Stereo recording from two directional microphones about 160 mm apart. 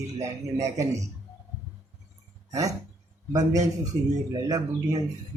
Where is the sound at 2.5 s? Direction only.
20° right (ahead or behind).